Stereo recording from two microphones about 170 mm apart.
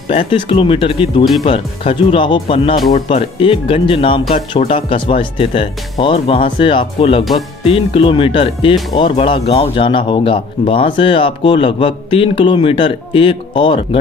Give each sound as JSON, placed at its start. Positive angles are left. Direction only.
{"t": 0.1, "sound": "speech", "side_deg": 35}